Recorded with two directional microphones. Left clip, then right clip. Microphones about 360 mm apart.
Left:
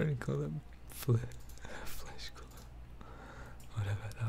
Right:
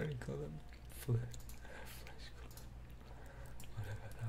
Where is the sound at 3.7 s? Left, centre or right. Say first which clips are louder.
Left 8 dB; left.